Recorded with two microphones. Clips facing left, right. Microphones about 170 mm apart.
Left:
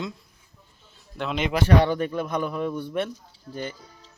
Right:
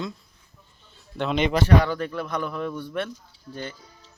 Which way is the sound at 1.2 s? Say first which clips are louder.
Right 3 dB; centre (ahead or behind).